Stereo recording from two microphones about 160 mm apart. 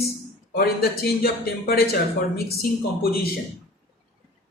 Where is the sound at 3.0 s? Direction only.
70° left (ahead or behind).